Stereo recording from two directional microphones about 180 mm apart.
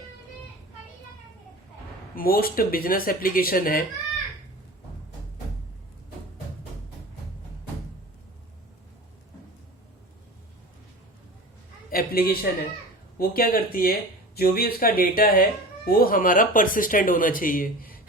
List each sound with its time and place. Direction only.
2.1 s speech: 55° left (ahead or behind)
11.9 s a sound: 55° left (ahead or behind)
13.1 s speech: 55° left (ahead or behind)